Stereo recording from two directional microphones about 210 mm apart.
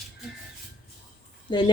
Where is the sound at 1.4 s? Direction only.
20° left (ahead or behind).